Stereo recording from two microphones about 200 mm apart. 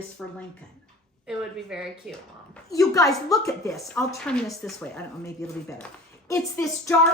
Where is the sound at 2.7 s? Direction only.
15° left (ahead or behind).